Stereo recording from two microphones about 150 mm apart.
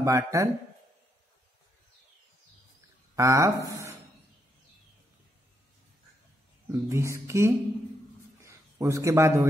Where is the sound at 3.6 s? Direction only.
20° right (ahead or behind).